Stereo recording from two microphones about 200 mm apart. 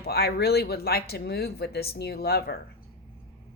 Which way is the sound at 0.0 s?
50° left (ahead or behind).